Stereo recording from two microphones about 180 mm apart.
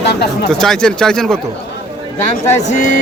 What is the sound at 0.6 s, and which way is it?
Speech, 5° left (ahead or behind).